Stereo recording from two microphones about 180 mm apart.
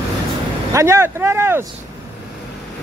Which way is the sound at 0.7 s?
15° right (ahead or behind).